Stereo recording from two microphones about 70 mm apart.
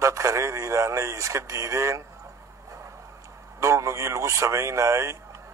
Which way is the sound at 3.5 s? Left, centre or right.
Right.